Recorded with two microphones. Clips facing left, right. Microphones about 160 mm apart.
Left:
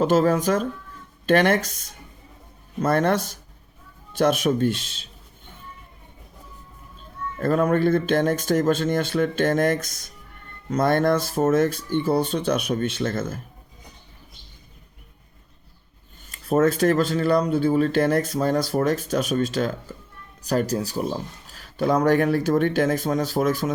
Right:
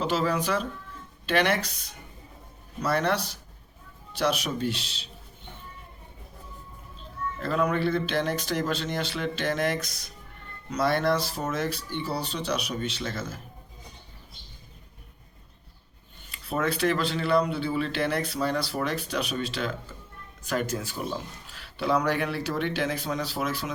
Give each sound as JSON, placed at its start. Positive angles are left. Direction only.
{"t": 0.0, "sound": "speech", "side_deg": 45}
{"t": 7.3, "sound": "speech", "side_deg": 50}
{"t": 16.3, "sound": "speech", "side_deg": 45}